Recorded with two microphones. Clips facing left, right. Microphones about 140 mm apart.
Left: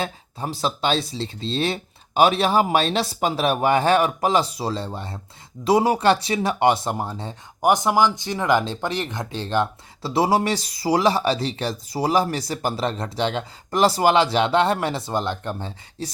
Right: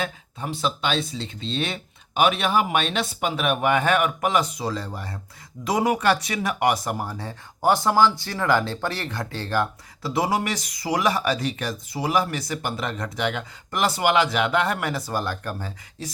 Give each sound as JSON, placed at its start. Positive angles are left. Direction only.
{"t": 0.0, "sound": "speech", "side_deg": 35}